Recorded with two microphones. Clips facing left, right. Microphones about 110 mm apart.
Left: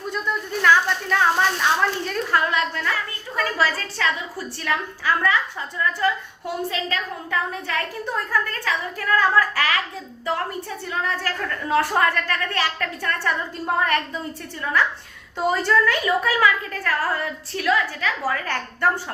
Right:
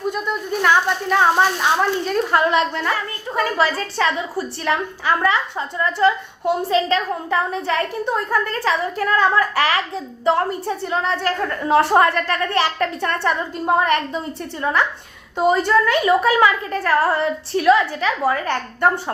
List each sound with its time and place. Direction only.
0.1 s a woman's voice: 15° right (ahead or behind)